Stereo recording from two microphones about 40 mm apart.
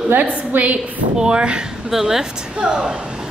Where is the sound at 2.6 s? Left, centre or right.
Centre.